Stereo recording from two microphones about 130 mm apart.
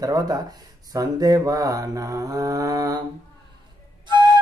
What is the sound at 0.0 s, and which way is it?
Mantra, 30° right (ahead or behind).